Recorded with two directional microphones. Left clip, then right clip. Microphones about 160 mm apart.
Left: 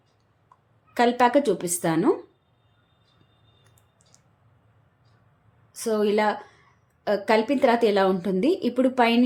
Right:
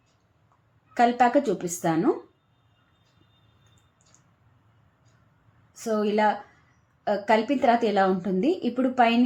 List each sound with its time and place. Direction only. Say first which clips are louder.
0.9 s a woman's voice: left 1 dB; 20° left (ahead or behind)
5.8 s a woman's voice: left 1 dB; 25° left (ahead or behind)